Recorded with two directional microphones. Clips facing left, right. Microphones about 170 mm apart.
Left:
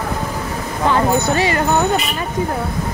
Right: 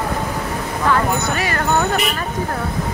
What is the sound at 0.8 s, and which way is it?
Speech, 20° left (ahead or behind).